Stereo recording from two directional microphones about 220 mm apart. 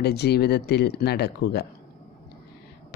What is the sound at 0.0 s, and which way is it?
A woman's voice, 45° left (ahead or behind).